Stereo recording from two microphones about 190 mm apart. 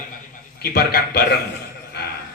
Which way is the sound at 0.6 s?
55° left (ahead or behind).